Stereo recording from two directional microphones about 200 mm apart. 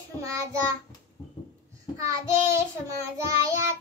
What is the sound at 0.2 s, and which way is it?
Child singing, 15° right (ahead or behind).